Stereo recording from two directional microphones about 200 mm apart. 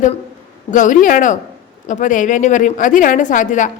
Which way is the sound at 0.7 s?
40° left (ahead or behind).